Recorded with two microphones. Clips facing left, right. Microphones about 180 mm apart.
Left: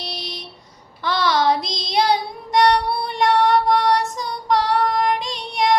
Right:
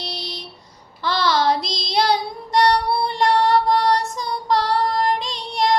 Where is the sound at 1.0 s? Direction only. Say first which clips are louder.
Even; 15° left (ahead or behind).